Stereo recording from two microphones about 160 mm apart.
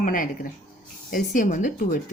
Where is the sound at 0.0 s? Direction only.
55° left (ahead or behind).